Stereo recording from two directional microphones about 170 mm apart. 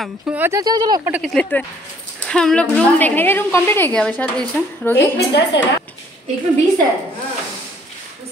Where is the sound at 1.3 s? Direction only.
10° left (ahead or behind).